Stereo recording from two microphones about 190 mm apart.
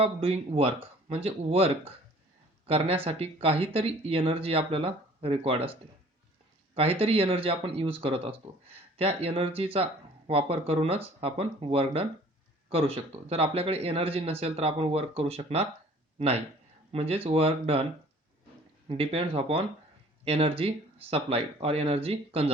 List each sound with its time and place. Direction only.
0.0 s speech: 30° right (ahead or behind)
6.7 s speech: 30° right (ahead or behind)
16.9 s speech: 30° right (ahead or behind)
18.9 s speech: 30° right (ahead or behind)